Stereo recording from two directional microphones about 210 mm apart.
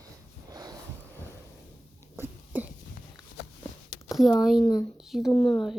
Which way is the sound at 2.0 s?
10° right (ahead or behind).